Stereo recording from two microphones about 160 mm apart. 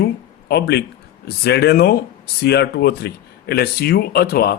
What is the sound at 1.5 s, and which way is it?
A man's voice, 85° left.